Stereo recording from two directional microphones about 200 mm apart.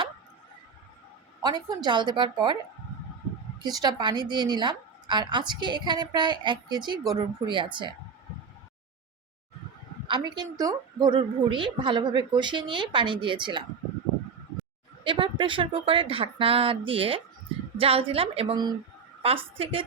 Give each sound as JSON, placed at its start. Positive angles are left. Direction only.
{"t": 1.4, "sound": "a woman's voice", "side_deg": -20}
{"t": 3.6, "sound": "a woman's voice", "side_deg": -20}
{"t": 10.1, "sound": "a woman's voice", "side_deg": -20}
{"t": 15.0, "sound": "a woman's voice", "side_deg": -25}